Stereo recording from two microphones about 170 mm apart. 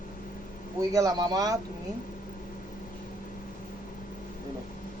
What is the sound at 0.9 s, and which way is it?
Speech, 20° right (ahead or behind).